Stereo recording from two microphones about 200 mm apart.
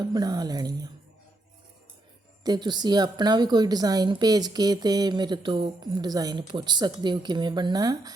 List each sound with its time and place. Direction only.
0.0 s a woman's voice: 20° right (ahead or behind)
2.4 s a woman's voice: 20° right (ahead or behind)